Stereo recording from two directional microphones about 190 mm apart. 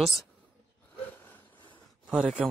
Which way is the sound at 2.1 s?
5° right (ahead or behind).